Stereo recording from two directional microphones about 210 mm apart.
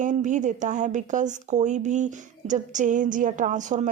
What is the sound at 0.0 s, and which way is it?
Speech, 35° right (ahead or behind).